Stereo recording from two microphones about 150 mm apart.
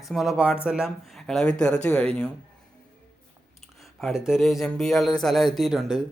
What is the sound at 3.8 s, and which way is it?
Speech, centre (ahead or behind).